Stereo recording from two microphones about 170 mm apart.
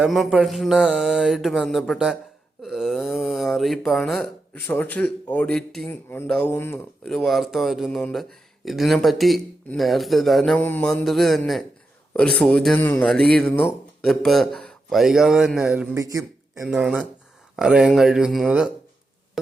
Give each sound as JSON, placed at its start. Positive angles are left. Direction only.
{"t": 0.0, "sound": "speech", "side_deg": 0}
{"t": 2.6, "sound": "a sound", "side_deg": 0}
{"t": 4.5, "sound": "speech", "side_deg": 10}
{"t": 7.1, "sound": "speech", "side_deg": 0}
{"t": 16.0, "sound": "speech", "side_deg": -20}
{"t": 16.6, "sound": "speech", "side_deg": -5}